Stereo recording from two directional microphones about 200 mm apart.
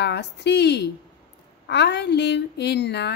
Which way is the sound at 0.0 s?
60° left (ahead or behind).